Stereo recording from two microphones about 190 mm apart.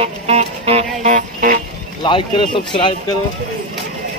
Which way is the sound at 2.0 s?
25° left (ahead or behind).